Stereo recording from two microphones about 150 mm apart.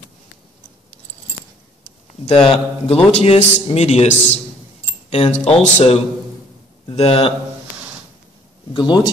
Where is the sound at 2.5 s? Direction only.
40° left (ahead or behind).